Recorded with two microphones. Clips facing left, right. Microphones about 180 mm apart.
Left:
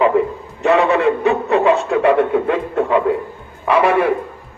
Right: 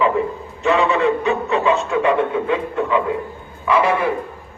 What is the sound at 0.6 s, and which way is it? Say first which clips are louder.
A man's voice: left 3 dB; 60° left (ahead or behind).